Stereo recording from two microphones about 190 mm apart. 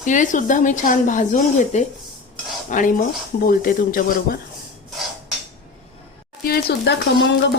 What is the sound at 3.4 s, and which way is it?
Speech, 50° left (ahead or behind).